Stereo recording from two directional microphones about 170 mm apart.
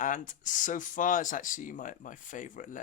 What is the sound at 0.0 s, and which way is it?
Speech, 50° left (ahead or behind).